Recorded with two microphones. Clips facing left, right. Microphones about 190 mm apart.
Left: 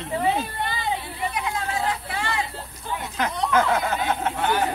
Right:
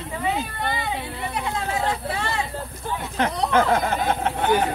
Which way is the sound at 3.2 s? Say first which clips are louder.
Right 2 dB; 30° right (ahead or behind).